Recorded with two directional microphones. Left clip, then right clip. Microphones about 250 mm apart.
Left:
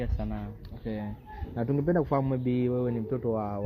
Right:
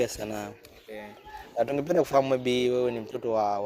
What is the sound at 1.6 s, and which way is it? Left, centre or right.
A man's voice, right.